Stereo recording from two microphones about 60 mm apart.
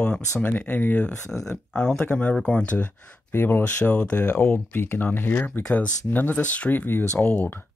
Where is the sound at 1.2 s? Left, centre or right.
Left.